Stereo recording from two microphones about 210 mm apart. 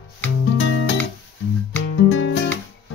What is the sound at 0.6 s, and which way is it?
Music, 60° left (ahead or behind).